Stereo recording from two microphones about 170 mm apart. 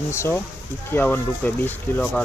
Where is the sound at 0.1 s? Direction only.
15° left (ahead or behind).